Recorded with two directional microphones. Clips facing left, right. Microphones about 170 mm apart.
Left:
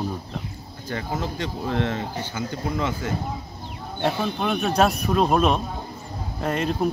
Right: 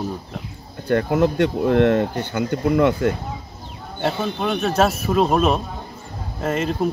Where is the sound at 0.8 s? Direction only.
65° right (ahead or behind).